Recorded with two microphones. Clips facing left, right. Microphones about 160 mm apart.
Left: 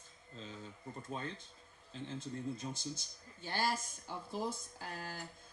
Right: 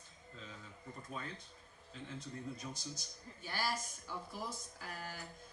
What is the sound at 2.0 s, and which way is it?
A woman's voice, 25° left (ahead or behind).